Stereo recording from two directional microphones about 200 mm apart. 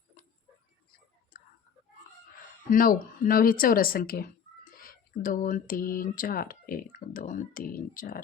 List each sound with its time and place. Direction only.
2.6 s speech: 45° left (ahead or behind)